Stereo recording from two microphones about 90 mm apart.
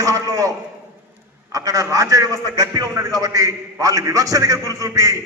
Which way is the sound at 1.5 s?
40° right (ahead or behind).